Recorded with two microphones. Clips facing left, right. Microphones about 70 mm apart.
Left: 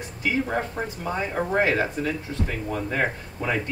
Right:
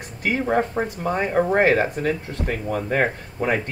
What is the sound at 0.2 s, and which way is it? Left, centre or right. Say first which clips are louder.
Speech: right 4 dB; right.